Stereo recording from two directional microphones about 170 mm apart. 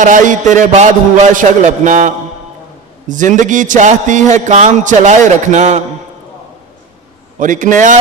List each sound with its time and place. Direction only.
0.0 s a man's voice: 50° right (ahead or behind)
3.1 s a man's voice: 50° right (ahead or behind)
7.3 s a man's voice: 50° right (ahead or behind)